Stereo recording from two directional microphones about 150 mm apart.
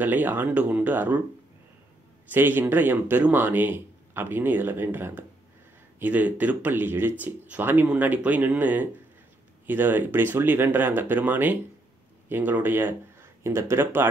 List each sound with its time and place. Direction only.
0.0 s a man's voice: 10° right (ahead or behind)
2.2 s a man's voice: 15° right (ahead or behind)